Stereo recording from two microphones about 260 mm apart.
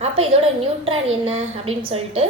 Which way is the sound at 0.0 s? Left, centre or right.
Right.